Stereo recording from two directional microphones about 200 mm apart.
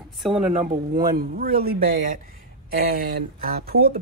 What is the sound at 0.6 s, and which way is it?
A man's voice, 45° right (ahead or behind).